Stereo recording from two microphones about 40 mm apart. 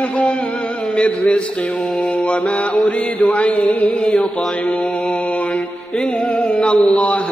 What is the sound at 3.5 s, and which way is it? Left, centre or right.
Mantra, left.